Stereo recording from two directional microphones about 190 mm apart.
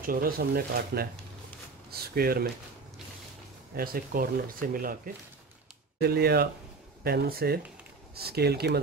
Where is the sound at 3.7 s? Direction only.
50° right (ahead or behind).